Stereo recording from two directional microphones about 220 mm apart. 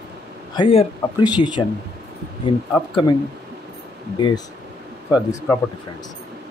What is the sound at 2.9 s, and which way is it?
Speech, 20° left (ahead or behind).